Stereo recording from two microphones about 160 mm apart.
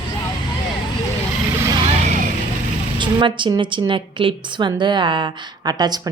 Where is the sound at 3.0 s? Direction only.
30° right (ahead or behind).